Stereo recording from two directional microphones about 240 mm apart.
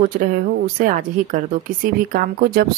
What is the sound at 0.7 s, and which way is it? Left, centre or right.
A woman's voice, right.